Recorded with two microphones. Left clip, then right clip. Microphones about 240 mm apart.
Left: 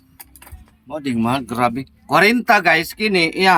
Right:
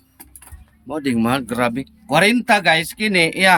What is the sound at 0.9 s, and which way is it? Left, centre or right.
Speech, centre.